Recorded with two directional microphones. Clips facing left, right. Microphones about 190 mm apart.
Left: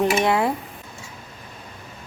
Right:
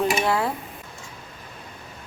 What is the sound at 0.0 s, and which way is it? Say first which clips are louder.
Mechanisms: left 3 dB; 20° left (ahead or behind).